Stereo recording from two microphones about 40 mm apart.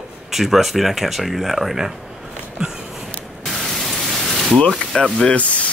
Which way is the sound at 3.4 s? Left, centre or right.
Centre.